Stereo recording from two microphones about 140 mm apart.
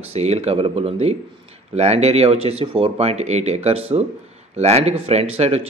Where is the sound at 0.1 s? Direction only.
50° right (ahead or behind).